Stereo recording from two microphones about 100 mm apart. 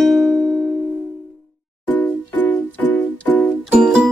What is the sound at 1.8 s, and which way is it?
Music, 20° left (ahead or behind).